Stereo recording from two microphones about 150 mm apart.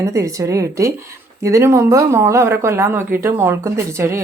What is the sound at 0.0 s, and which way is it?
Speech, 20° right (ahead or behind).